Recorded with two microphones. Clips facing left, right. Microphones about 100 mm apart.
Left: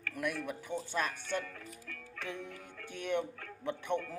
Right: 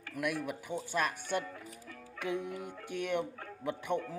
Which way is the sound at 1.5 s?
15° right (ahead or behind).